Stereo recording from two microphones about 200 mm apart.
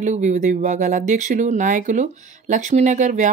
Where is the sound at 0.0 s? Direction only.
35° right (ahead or behind).